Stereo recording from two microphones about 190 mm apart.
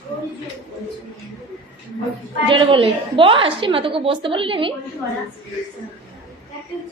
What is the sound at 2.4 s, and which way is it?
A woman's voice, 25° right (ahead or behind).